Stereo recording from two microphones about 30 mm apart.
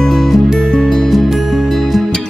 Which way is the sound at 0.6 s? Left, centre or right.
Left.